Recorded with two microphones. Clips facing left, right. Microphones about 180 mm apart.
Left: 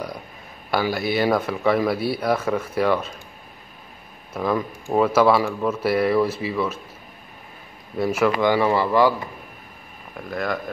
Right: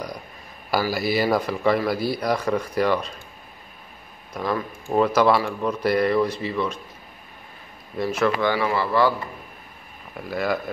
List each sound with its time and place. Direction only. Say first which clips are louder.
0.7 s a man's voice: even; 5° right (ahead or behind)
4.3 s a man's voice: left 3 dB; 5° left (ahead or behind)
8.0 s speech: left 2 dB; 10° left (ahead or behind)
10.1 s a man's voice: right 1 dB; 5° right (ahead or behind)